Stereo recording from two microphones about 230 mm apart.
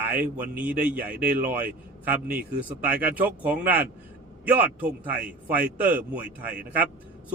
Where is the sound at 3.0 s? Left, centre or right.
Right.